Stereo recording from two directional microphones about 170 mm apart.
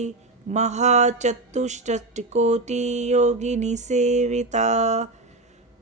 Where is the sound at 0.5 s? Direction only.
40° right (ahead or behind).